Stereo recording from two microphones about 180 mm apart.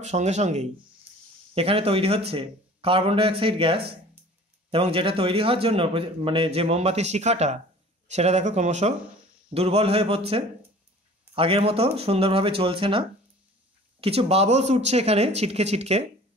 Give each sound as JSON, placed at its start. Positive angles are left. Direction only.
{"t": 0.0, "sound": "a man's voice", "side_deg": -40}
{"t": 14.0, "sound": "a man's voice", "side_deg": -35}